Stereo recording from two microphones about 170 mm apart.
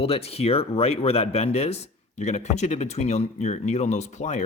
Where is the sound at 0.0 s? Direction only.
35° left (ahead or behind).